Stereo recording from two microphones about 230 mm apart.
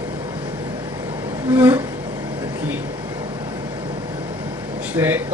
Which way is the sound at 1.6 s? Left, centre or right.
Centre.